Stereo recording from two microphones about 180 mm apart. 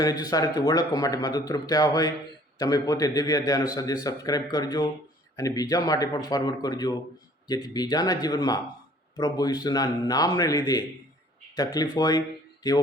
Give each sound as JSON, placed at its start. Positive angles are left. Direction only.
{"t": 0.0, "sound": "a man's voice", "side_deg": 20}